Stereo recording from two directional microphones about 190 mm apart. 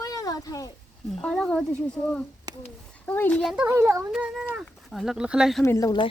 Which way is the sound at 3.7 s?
15° right (ahead or behind).